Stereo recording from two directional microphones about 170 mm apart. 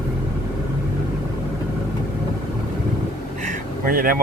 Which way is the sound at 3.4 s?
60° right (ahead or behind).